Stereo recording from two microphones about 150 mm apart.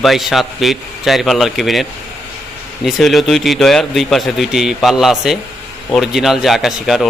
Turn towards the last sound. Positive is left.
turn(degrees=0)  # may be behind; listen again after turning